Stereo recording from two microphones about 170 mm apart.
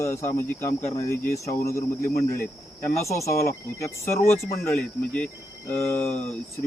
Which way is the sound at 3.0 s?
15° left (ahead or behind).